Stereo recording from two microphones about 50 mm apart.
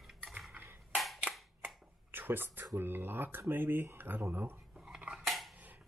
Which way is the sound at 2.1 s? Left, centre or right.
Right.